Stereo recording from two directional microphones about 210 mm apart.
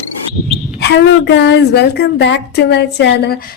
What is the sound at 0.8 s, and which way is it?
A woman's voice, 55° left (ahead or behind).